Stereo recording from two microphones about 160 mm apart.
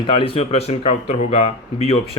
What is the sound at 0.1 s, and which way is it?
Speech, 35° left (ahead or behind).